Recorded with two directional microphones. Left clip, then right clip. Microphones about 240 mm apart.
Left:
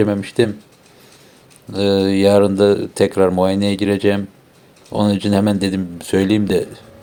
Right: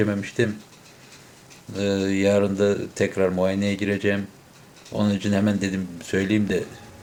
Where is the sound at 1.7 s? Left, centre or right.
Left.